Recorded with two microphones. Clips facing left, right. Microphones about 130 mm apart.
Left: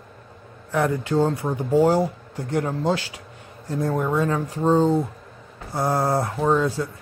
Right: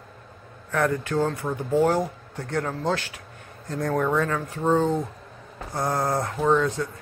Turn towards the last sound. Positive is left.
turn(degrees=15)  # may be behind; listen again after turning